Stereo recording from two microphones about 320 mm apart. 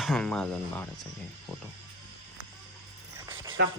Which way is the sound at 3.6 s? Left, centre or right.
Right.